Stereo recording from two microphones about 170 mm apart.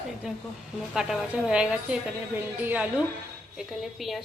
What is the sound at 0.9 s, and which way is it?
A woman's voice, 5° right (ahead or behind).